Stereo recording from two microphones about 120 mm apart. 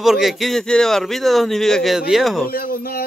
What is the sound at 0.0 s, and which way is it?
A man's voice, 5° right (ahead or behind).